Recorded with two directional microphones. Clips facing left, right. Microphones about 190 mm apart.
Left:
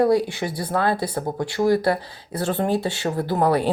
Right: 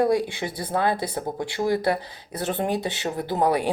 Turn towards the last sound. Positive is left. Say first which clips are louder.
# left 2 dB
turn(degrees=-15)  # may be behind; listen again after turning